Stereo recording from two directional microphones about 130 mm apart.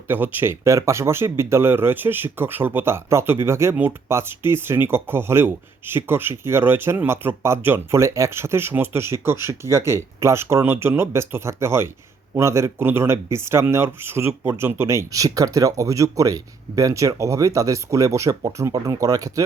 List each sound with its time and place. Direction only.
0.1 s speech: 15° right (ahead or behind)